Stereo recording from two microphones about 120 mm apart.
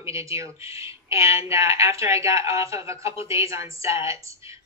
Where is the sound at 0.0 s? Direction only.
25° right (ahead or behind).